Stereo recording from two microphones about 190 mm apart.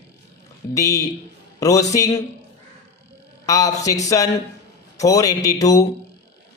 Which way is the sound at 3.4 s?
15° left (ahead or behind).